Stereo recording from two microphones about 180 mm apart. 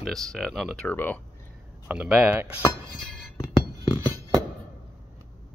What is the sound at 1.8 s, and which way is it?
Speech, 10° right (ahead or behind).